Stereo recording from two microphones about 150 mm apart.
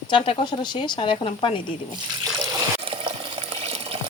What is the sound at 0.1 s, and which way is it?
Speech, 35° left (ahead or behind).